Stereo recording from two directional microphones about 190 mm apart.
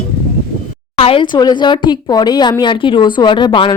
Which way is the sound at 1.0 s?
25° left (ahead or behind).